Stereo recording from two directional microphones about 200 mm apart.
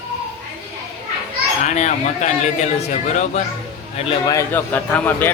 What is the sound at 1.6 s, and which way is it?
Speech, 35° left (ahead or behind).